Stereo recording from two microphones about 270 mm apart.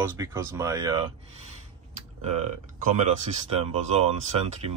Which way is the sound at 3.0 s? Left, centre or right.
Right.